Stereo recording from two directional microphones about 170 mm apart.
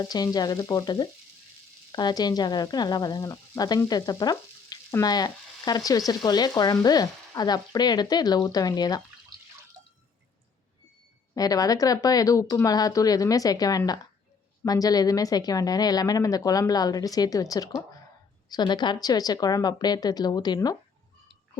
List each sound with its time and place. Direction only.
0.0 s speech: 20° left (ahead or behind)
11.3 s speech: 20° left (ahead or behind)